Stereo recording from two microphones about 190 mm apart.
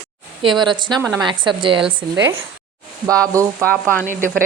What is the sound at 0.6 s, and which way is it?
A woman's voice, 25° right (ahead or behind).